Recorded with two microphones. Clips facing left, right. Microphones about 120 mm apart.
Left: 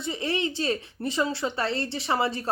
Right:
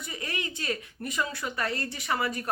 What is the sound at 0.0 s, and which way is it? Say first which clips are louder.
A woman's voice: left 8 dB; 25° left (ahead or behind).